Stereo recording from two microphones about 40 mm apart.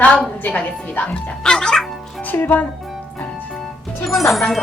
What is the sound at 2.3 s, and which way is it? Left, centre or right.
Speech, left.